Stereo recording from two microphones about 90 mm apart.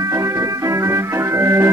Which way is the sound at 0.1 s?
35° right (ahead or behind).